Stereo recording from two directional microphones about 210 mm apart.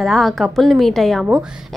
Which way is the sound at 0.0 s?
Centre (ahead or behind).